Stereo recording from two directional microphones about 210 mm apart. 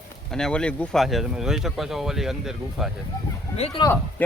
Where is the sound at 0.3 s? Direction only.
5° left (ahead or behind).